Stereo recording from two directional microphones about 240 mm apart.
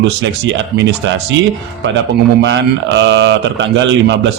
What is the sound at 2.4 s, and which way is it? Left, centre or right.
A man's voice, right.